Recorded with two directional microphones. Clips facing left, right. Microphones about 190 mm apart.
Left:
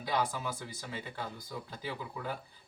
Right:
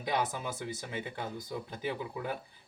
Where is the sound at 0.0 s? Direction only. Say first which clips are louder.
Right 1 dB; 20° right (ahead or behind).